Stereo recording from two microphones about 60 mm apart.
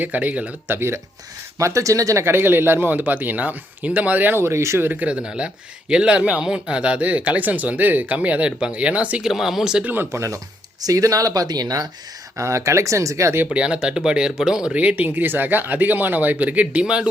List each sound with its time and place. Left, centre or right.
0.0 s speech: right
0.7 s speech: right
1.5 s speech: right
2.2 s speech: right
4.4 s speech: right
4.9 s speech: right
9.2 s speech: centre
9.8 s speech: right
10.1 s speech: right
12.4 s speech: right
13.5 s speech: centre
14.7 s speech: right